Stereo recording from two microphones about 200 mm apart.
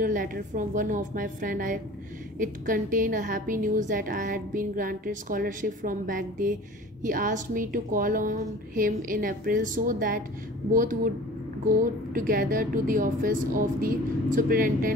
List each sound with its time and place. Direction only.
0.0 s a woman's voice: 45° right (ahead or behind)